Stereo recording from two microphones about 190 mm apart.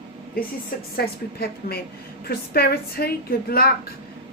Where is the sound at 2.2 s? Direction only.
55° left (ahead or behind).